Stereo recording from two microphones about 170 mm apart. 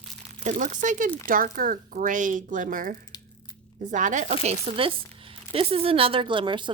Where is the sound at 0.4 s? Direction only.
50° right (ahead or behind).